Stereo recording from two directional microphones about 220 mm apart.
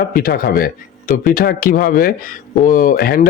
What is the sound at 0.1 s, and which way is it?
Speech, 40° left (ahead or behind).